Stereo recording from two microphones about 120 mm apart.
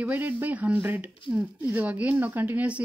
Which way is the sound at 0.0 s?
15° right (ahead or behind).